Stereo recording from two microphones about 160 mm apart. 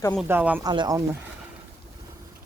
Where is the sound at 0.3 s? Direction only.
10° right (ahead or behind).